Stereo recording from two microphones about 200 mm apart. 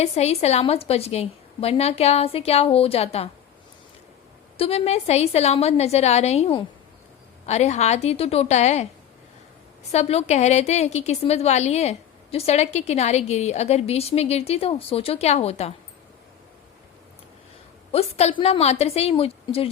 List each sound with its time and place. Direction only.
0.0 s a woman's voice: 30° left (ahead or behind)
4.5 s a woman's voice: 30° left (ahead or behind)
9.9 s a woman's voice: 30° left (ahead or behind)
17.9 s a woman's voice: 30° left (ahead or behind)